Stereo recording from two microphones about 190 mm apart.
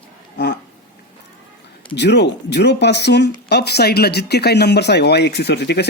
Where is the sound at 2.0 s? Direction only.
65° left (ahead or behind).